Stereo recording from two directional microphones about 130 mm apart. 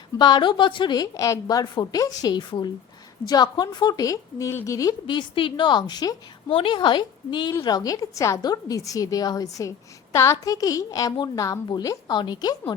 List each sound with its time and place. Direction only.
0.2 s a woman's voice: 35° left (ahead or behind)